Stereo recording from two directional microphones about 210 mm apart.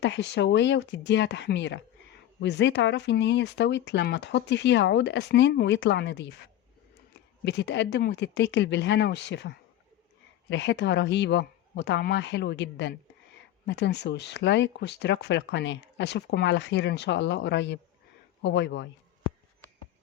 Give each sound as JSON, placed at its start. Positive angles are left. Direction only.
{"t": 0.0, "sound": "speech", "side_deg": 55}